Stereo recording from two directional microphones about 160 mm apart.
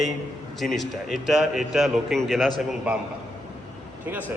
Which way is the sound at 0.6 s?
Centre (ahead or behind).